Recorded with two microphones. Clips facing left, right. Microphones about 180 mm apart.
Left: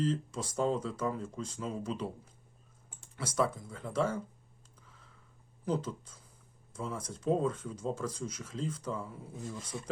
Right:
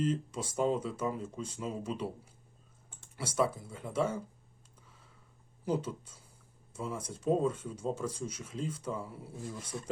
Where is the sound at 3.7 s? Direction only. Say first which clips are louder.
Left 2 dB; 10° right (ahead or behind).